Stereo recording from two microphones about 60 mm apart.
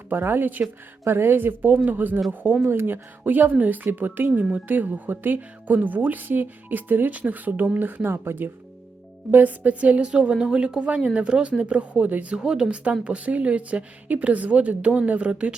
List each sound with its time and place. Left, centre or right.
0.1 s speech: right
9.3 s speech: right